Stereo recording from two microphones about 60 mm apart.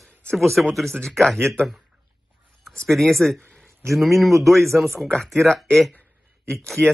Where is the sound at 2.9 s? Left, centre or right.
Centre.